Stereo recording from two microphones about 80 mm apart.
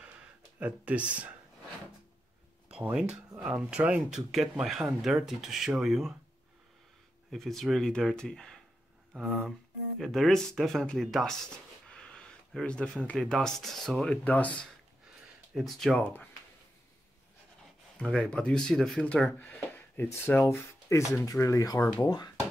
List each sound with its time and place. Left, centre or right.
0.6 s speech: centre
2.7 s speech: centre
7.2 s speech: centre
9.2 s speech: centre
11.9 s a sound: centre
13.0 s speech: centre
14.0 s speech: centre
15.5 s speech: centre
16.0 s speech: centre
17.9 s speech: centre
19.3 s speech: left
21.2 s speech: left
22.0 s speech: left